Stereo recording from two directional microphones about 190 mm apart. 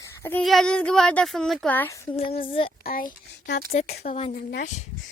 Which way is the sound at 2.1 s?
30° left (ahead or behind).